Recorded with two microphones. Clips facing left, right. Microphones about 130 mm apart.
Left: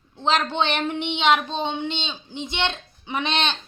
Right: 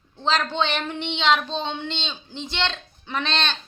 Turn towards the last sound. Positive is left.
turn(degrees=20)  # may be behind; listen again after turning